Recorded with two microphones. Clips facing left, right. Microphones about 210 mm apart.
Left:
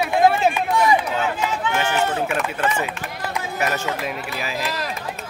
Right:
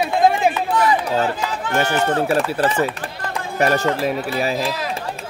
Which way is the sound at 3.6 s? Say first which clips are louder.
Right 8 dB; 40° right (ahead or behind).